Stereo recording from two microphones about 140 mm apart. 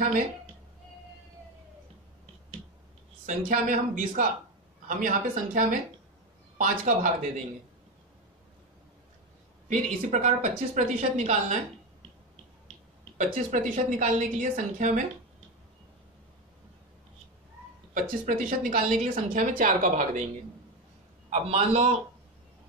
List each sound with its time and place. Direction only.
3.3 s a woman's voice: 70° right (ahead or behind)
9.7 s a woman's voice: 60° right (ahead or behind)
13.2 s a woman's voice: 65° right (ahead or behind)
18.2 s a woman's voice: 70° right (ahead or behind)
21.3 s a man's voice: 50° right (ahead or behind)